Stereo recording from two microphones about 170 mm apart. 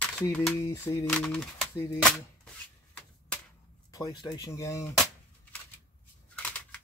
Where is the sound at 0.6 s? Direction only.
20° left (ahead or behind).